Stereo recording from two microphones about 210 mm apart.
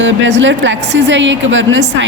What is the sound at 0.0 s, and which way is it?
A woman's voice, 60° right (ahead or behind).